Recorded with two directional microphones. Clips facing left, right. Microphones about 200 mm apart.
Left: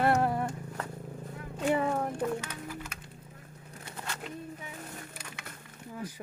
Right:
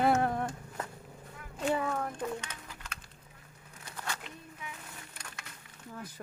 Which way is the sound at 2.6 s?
10° left (ahead or behind).